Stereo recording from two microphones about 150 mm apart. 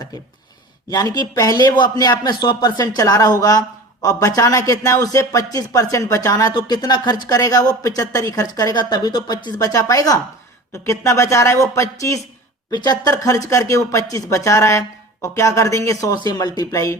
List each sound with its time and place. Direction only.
0.9 s speech: 25° left (ahead or behind)